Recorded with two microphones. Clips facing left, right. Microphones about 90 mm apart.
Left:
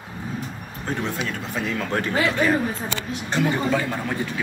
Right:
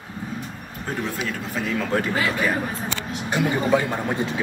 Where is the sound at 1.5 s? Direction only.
Centre (ahead or behind).